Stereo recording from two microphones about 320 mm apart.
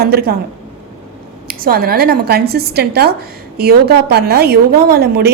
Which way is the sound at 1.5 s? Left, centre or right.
Right.